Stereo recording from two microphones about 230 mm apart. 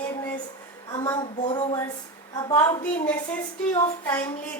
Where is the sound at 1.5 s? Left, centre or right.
Centre.